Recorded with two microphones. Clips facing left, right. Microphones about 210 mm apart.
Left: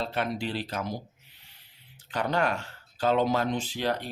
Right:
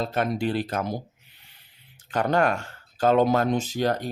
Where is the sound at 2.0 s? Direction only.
50° right (ahead or behind).